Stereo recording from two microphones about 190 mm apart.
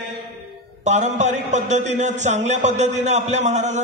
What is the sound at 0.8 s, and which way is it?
A man's voice, 40° right (ahead or behind).